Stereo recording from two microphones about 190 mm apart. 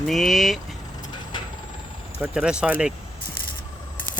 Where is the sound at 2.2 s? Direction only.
5° right (ahead or behind).